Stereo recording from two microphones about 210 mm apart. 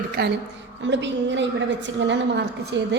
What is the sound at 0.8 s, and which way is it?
A woman's voice, 60° right (ahead or behind).